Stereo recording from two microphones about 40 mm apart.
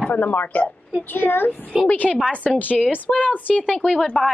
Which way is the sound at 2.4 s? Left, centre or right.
Left.